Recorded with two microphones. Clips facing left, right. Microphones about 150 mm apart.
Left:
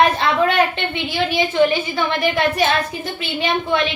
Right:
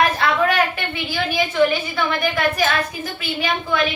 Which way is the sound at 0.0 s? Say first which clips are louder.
Left 2 dB; 25° left (ahead or behind).